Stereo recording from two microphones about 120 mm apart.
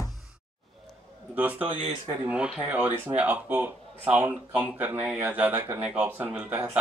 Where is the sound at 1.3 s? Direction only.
15° right (ahead or behind).